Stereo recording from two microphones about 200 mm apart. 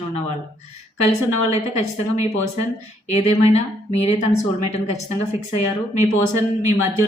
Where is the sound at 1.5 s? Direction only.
35° left (ahead or behind).